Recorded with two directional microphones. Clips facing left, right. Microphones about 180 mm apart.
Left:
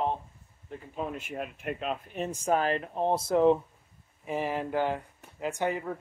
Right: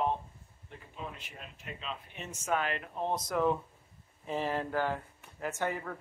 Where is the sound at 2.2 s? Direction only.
35° left (ahead or behind).